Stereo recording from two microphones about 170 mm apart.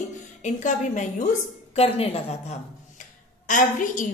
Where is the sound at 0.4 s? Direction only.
45° left (ahead or behind).